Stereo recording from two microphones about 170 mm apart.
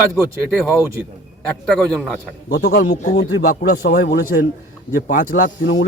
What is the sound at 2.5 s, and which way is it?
Speech, 75° left (ahead or behind).